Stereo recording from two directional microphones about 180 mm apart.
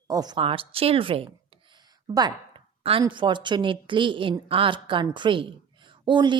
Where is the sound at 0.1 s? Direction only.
20° right (ahead or behind).